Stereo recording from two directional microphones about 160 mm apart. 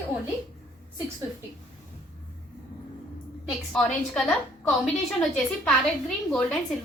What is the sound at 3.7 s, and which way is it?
Speech, centre (ahead or behind).